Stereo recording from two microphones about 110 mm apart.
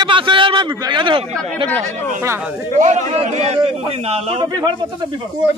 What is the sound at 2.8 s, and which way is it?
Speech, 80° right.